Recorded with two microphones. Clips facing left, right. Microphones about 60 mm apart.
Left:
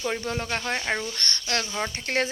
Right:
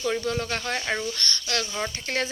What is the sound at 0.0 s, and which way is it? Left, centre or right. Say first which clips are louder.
Speech: right 2 dB; left.